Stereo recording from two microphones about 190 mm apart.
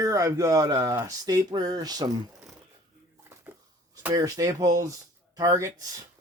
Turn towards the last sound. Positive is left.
turn(degrees=-15)  # may be behind; listen again after turning